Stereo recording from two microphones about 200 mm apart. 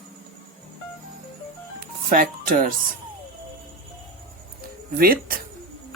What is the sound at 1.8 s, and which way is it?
Music, 45° right (ahead or behind).